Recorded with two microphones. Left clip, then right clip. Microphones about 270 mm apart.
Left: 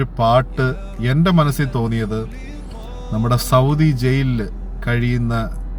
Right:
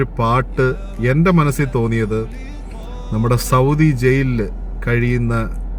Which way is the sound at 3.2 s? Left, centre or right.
Centre.